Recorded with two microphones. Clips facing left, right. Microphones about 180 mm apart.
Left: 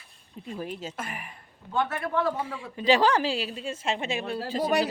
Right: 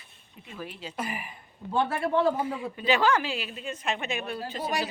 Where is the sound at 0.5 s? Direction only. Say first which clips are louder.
Left 4 dB; 40° left (ahead or behind).